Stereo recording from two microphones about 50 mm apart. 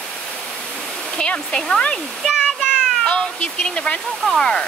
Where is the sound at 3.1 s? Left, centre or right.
Centre.